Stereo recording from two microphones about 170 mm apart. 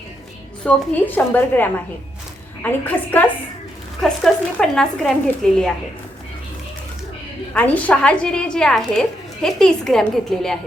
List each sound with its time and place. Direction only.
0.6 s a woman's voice: 10° left (ahead or behind)
7.5 s a woman's voice: 10° left (ahead or behind)